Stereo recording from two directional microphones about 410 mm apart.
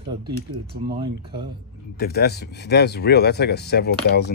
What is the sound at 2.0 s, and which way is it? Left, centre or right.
Speech, left.